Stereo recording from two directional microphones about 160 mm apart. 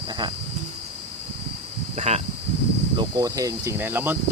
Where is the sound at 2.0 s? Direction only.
40° right (ahead or behind).